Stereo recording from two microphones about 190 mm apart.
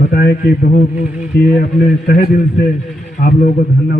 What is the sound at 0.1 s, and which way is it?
Speech, 55° left (ahead or behind).